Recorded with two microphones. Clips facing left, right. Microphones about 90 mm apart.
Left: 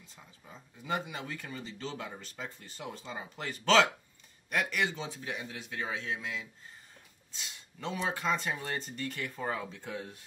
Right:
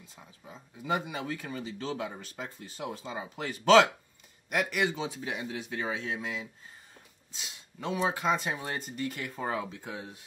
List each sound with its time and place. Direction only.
0.5 s speech: 15° right (ahead or behind)
7.4 s speech: 10° right (ahead or behind)